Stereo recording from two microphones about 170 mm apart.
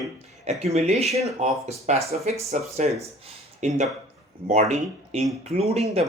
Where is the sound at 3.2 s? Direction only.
40° right (ahead or behind).